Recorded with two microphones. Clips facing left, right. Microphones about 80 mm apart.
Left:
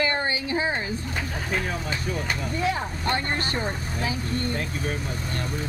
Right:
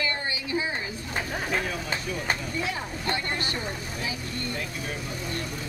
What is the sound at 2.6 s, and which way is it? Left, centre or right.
A woman's voice, left.